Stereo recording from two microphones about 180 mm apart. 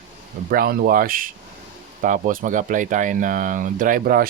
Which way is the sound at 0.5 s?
55° right (ahead or behind).